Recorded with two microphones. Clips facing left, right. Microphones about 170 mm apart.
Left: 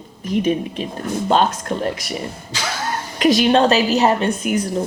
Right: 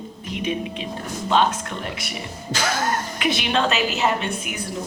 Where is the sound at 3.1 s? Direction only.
40° left (ahead or behind).